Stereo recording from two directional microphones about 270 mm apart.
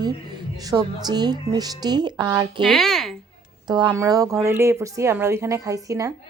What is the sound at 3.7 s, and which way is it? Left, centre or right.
A woman's voice, centre.